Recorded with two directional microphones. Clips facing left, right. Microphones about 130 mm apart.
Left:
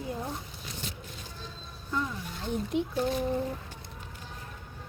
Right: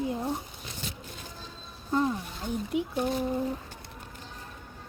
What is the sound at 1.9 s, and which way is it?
Speech, 35° right (ahead or behind).